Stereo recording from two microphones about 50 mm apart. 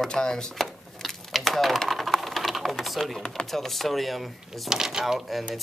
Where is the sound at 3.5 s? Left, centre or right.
Centre.